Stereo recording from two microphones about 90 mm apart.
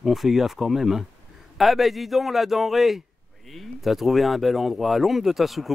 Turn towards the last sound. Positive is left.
turn(degrees=0)  # may be behind; listen again after turning